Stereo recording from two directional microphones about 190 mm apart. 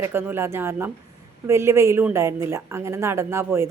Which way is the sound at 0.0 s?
10° right (ahead or behind).